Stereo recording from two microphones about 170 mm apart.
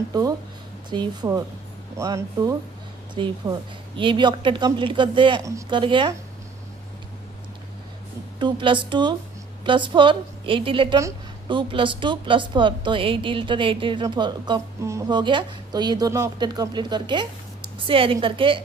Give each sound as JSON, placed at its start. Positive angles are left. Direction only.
{"t": 0.1, "sound": "a woman's voice", "side_deg": -20}
{"t": 5.4, "sound": "a woman's voice", "side_deg": -20}
{"t": 8.4, "sound": "a woman's voice", "side_deg": -30}